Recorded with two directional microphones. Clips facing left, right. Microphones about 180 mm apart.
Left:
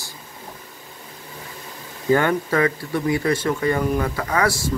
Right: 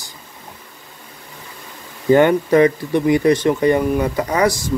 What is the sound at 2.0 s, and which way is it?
A man's voice, 20° right (ahead or behind).